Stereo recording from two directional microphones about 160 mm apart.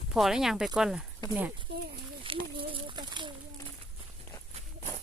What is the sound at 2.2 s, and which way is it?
Speech, 35° right (ahead or behind).